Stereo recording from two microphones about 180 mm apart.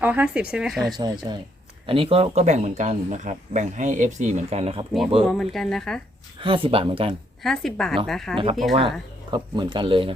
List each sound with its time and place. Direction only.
0.0 s speech: 10° right (ahead or behind)
0.9 s speech: 20° right (ahead or behind)
5.2 s speech: centre (ahead or behind)
6.4 s speech: 30° right (ahead or behind)
7.4 s speech: centre (ahead or behind)
9.3 s speech: 25° right (ahead or behind)